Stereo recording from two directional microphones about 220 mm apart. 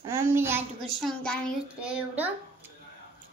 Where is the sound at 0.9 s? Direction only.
Centre (ahead or behind).